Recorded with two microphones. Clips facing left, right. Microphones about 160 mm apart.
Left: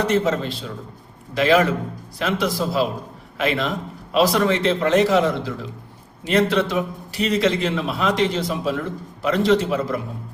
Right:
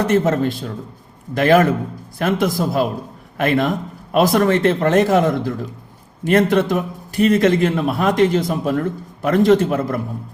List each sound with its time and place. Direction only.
0.0 s a man's voice: 50° right (ahead or behind)